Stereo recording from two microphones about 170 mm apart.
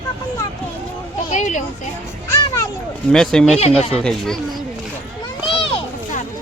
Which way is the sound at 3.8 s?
35° left (ahead or behind).